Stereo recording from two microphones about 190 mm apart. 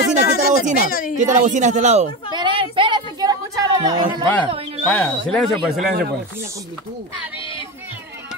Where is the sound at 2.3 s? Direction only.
25° right (ahead or behind).